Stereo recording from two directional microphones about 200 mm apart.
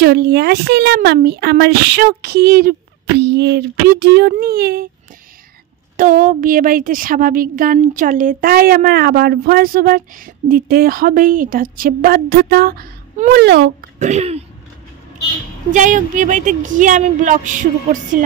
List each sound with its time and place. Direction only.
0.0 s a woman's voice: 55° right (ahead or behind)
5.9 s a woman's voice: 40° right (ahead or behind)
13.3 s speech: 55° right (ahead or behind)
13.9 s a woman's voice: 35° right (ahead or behind)
15.7 s speech: 40° right (ahead or behind)